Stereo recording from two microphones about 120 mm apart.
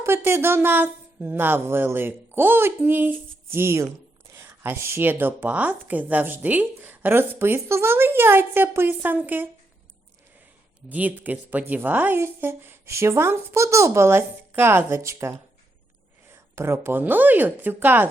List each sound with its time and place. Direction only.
0.0 s a woman's voice: 20° right (ahead or behind)
10.8 s a woman's voice: 15° right (ahead or behind)